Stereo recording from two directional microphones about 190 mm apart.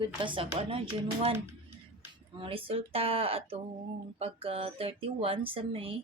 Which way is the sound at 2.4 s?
30° right (ahead or behind).